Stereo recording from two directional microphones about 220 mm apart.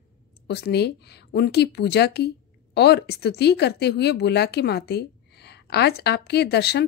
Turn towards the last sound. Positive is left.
turn(degrees=50)  # may be behind; listen again after turning